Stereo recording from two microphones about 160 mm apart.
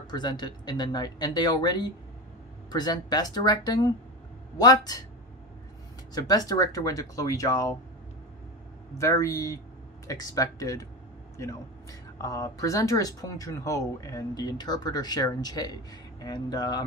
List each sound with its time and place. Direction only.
0.0 s speech: 25° left (ahead or behind)
6.1 s speech: 25° left (ahead or behind)
8.9 s speech: 20° left (ahead or behind)